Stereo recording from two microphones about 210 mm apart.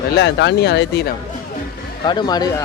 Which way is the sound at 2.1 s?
20° left (ahead or behind).